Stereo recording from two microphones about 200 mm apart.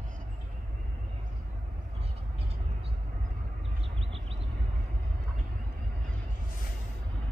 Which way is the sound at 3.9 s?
30° right (ahead or behind).